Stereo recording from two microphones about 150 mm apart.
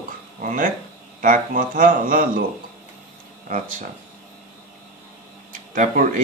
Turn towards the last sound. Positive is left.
turn(degrees=-60)  # may be behind; listen again after turning